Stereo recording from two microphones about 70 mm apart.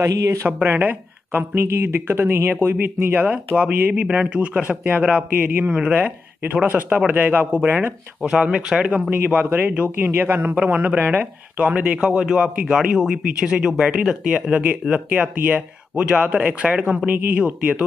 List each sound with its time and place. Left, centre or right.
0.0 s speech: right
0.5 s speech: right
1.6 s speech: right
8.2 s speech: centre
9.3 s speech: right